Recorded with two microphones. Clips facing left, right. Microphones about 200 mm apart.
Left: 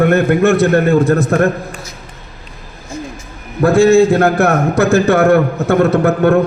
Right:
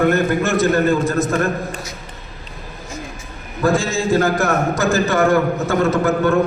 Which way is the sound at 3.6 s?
60° left (ahead or behind).